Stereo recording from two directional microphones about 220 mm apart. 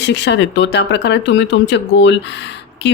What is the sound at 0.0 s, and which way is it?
A woman's voice, 55° left (ahead or behind).